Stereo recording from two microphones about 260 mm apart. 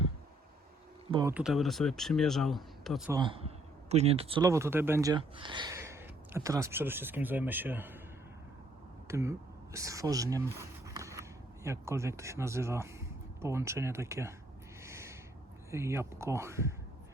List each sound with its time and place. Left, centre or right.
1.3 s speech: centre
3.1 s speech: centre
9.0 s speech: centre
14.8 s owl: centre
15.7 s speech: centre